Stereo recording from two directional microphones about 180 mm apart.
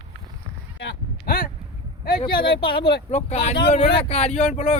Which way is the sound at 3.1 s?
35° left (ahead or behind).